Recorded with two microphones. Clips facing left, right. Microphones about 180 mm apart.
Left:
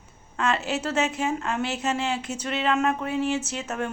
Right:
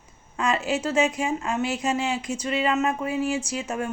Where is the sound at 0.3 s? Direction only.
Centre (ahead or behind).